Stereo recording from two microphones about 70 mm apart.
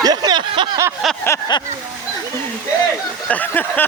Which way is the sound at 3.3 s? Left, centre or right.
Left.